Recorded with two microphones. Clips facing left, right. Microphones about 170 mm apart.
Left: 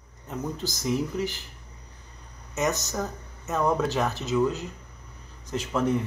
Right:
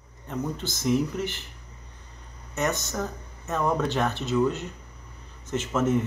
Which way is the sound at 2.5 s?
Centre (ahead or behind).